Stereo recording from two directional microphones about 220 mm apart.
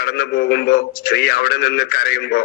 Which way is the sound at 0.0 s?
45° left (ahead or behind).